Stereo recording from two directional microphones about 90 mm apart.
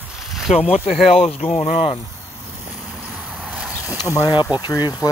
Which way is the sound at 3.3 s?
10° right (ahead or behind).